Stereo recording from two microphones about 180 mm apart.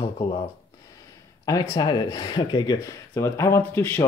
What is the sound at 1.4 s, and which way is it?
Speech, 20° left (ahead or behind).